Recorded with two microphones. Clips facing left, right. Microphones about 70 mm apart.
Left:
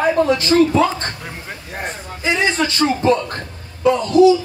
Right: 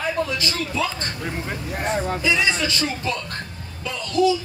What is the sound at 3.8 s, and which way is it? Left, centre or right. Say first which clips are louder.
Speech: left 15 dB; left.